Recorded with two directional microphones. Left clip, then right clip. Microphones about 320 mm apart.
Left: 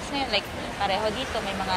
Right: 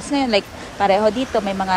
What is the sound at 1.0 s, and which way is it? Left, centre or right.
Speech, right.